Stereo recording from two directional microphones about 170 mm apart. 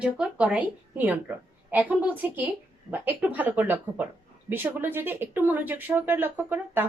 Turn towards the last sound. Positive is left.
turn(degrees=-10)  # may be behind; listen again after turning